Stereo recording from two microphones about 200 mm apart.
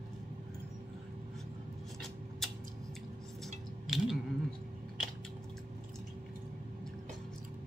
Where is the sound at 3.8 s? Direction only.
Centre (ahead or behind).